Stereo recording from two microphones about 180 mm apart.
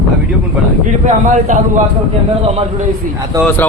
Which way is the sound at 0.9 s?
40° right (ahead or behind).